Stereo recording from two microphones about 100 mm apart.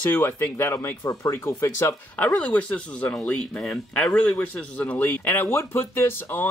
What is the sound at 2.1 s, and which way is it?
Speech, 15° left (ahead or behind).